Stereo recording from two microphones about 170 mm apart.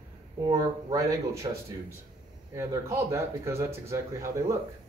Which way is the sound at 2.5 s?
15° right (ahead or behind).